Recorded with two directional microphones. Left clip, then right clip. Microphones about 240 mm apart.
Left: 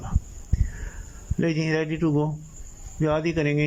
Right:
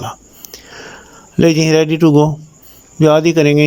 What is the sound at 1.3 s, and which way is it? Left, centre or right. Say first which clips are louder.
Speech: right 14 dB; right.